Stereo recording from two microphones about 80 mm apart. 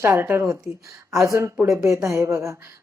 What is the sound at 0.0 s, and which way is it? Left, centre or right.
Speech, right.